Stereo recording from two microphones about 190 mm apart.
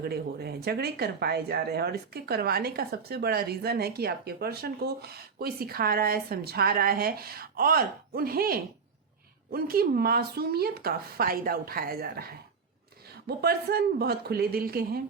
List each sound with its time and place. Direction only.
0.0 s speech: 55° right (ahead or behind)